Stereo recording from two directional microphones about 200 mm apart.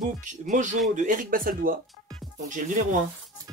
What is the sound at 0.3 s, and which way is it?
Speech, 40° right (ahead or behind).